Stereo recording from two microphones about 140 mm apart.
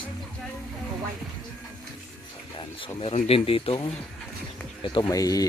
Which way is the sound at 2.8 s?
45° left (ahead or behind).